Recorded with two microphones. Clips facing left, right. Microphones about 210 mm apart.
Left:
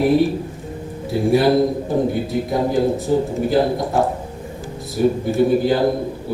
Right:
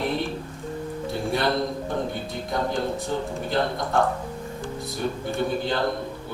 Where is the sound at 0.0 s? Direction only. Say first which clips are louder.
Left 11 dB; 5° left (ahead or behind).